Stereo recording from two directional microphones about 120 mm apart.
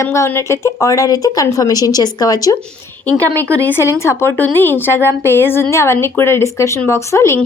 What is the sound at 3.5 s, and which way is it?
A woman's voice, 15° left (ahead or behind).